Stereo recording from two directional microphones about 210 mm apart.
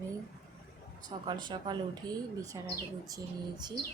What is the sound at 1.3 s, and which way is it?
Speech, 20° right (ahead or behind).